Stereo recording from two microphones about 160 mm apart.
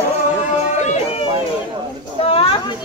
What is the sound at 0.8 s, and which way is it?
Music, 45° left (ahead or behind).